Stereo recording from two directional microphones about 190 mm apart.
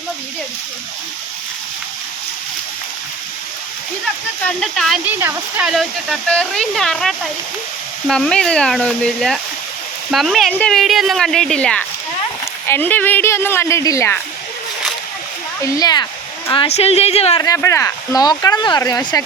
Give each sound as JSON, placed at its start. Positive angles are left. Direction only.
{"t": 4.4, "sound": "speech", "side_deg": 5}
{"t": 5.0, "sound": "speech", "side_deg": -10}
{"t": 15.6, "sound": "a woman's voice", "side_deg": 20}
{"t": 17.4, "sound": "speech", "side_deg": 15}